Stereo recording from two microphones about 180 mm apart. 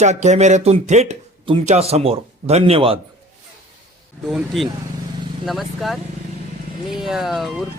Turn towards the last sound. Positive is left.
turn(degrees=0)  # may be behind; listen again after turning